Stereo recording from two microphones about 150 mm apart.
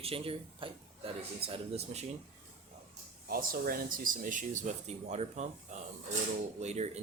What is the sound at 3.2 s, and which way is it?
Speech, 75° right (ahead or behind).